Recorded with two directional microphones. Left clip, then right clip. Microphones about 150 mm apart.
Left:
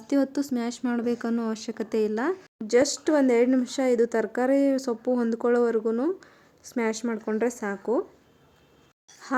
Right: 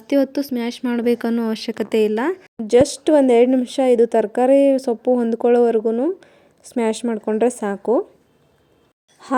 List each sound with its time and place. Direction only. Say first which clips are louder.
0.1 s speech: right 7 dB; 15° right (ahead or behind)